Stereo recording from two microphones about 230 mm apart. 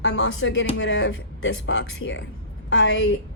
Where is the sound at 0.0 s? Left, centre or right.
Left.